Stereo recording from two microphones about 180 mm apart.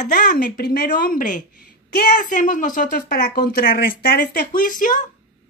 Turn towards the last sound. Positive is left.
turn(degrees=50)  # may be behind; listen again after turning